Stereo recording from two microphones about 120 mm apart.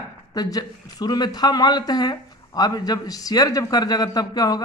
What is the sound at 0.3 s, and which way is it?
Speech, 35° left (ahead or behind).